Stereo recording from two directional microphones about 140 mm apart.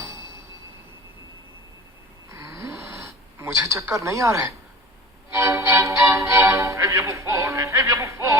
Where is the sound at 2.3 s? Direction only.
20° right (ahead or behind).